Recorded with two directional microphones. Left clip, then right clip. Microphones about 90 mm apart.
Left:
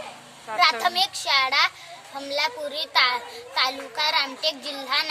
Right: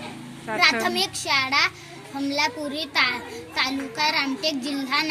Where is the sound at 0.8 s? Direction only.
55° left (ahead or behind).